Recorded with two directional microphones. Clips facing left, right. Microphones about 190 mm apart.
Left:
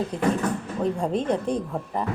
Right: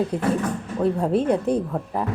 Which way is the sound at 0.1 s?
10° right (ahead or behind).